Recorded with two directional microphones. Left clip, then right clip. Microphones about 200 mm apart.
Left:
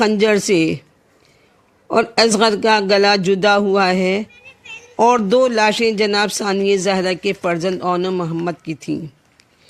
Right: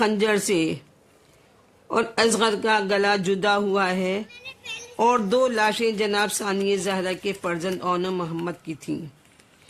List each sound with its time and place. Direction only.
0.0 s a man's voice: 25° left (ahead or behind)
1.9 s a man's voice: 30° left (ahead or behind)